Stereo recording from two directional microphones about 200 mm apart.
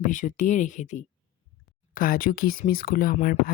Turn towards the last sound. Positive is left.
turn(degrees=45)  # may be behind; listen again after turning